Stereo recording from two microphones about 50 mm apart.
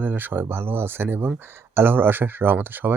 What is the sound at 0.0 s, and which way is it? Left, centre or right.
Speech, right.